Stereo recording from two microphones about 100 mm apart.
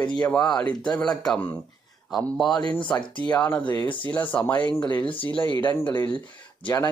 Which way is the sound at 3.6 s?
50° left (ahead or behind).